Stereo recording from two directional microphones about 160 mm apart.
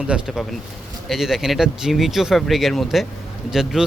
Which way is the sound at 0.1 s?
5° right (ahead or behind).